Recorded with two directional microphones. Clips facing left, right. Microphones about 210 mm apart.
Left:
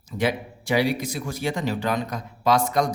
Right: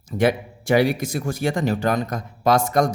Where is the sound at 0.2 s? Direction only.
50° right (ahead or behind).